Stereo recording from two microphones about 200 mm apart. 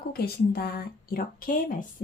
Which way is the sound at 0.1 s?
50° left (ahead or behind).